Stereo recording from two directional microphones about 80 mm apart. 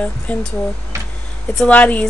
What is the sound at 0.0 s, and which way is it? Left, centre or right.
Speech, centre.